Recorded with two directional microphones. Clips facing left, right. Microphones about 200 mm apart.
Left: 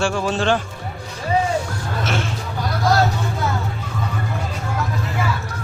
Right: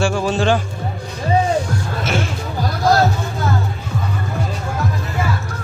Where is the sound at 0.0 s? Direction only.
5° right (ahead or behind).